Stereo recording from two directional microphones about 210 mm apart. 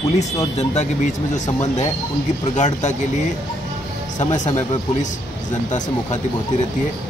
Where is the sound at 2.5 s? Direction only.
35° left (ahead or behind).